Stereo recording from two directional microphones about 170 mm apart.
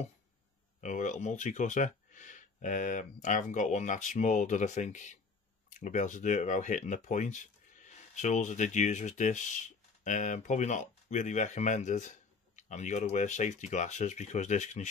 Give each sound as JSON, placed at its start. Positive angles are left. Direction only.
{"t": 0.7, "sound": "speech", "side_deg": 45}